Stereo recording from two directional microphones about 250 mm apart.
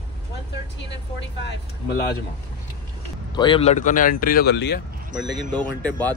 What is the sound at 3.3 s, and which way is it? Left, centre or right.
Speech, centre.